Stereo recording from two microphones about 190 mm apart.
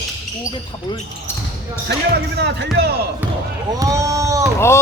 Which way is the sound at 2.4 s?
65° right (ahead or behind).